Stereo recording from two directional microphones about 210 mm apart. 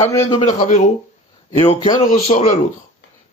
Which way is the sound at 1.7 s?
25° left (ahead or behind).